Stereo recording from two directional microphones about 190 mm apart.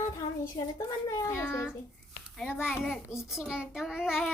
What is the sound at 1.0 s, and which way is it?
Speech, 15° left (ahead or behind).